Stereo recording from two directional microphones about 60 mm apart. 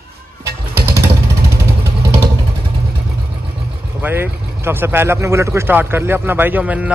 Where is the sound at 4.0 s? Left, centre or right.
Right.